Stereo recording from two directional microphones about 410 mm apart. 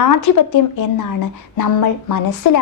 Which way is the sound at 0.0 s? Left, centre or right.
Left.